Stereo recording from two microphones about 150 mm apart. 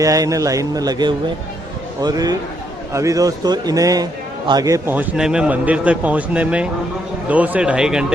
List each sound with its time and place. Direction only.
0.0 s a man's voice: 20° right (ahead or behind); by 8.0 s 5° right (ahead or behind)